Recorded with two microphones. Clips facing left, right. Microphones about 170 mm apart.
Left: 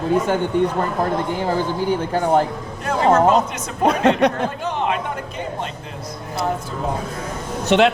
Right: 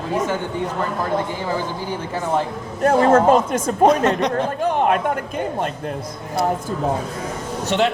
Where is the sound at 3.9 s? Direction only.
60° left (ahead or behind).